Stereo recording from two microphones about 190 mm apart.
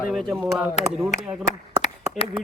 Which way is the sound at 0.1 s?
Centre (ahead or behind).